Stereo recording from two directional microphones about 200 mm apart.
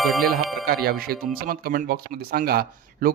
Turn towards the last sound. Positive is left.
turn(degrees=-50)  # may be behind; listen again after turning